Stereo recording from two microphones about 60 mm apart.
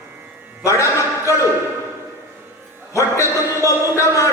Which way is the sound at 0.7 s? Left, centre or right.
Left.